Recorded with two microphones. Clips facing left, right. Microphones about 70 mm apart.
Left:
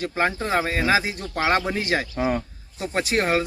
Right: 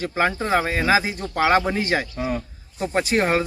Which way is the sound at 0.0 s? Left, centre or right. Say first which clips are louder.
Right 2 dB; centre.